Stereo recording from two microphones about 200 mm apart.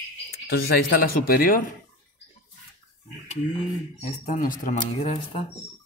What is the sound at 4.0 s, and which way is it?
Speech, 40° left (ahead or behind).